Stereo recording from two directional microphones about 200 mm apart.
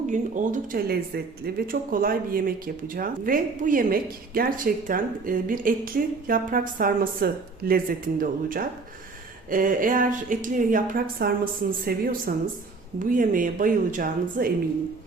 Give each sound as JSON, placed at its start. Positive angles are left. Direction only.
{"t": 0.1, "sound": "speech", "side_deg": -40}